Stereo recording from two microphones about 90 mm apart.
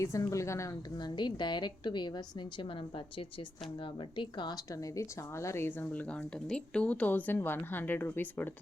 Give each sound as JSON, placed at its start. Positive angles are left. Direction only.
{"t": 0.0, "sound": "speech", "side_deg": 35}
{"t": 0.9, "sound": "a woman's voice", "side_deg": 55}
{"t": 4.2, "sound": "a woman's voice", "side_deg": 60}
{"t": 4.7, "sound": "speech", "side_deg": 40}